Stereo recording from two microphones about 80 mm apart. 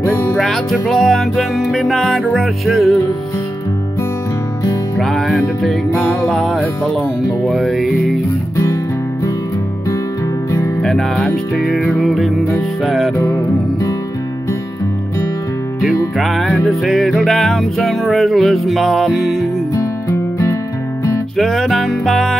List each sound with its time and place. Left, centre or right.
0.0 s music: left
0.4 s music: centre
4.9 s music: centre
6.6 s speech: centre
7.2 s music: centre
10.8 s speech: centre
11.6 s music: centre
16.2 s music: centre
19.7 s music: left
21.4 s music: centre